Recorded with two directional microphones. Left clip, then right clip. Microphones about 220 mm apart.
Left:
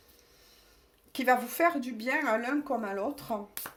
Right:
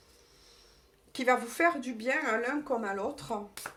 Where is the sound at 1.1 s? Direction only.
40° left (ahead or behind).